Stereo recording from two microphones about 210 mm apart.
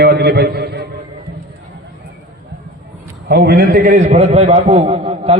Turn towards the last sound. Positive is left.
turn(degrees=-30)  # may be behind; listen again after turning